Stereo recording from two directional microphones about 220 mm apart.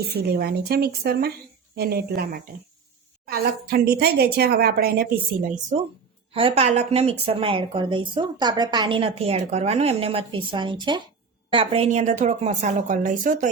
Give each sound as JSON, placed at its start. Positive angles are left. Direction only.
{"t": 0.1, "sound": "a woman's voice", "side_deg": -45}